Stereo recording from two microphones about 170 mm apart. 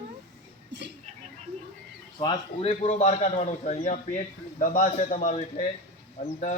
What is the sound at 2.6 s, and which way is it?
A man's voice, 40° left (ahead or behind).